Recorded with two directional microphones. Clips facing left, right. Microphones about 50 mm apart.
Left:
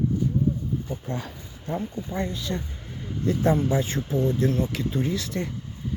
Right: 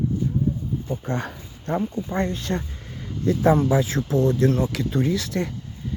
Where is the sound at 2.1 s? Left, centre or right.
Right.